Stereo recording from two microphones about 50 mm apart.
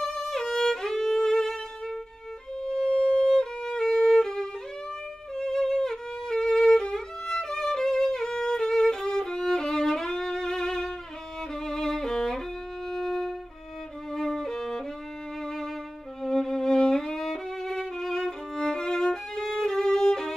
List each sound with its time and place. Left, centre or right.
0.0 s violin: centre
15.4 s music: centre
16.2 s violin: centre